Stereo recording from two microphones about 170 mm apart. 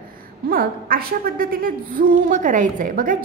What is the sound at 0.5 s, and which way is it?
A woman's voice, 60° right (ahead or behind).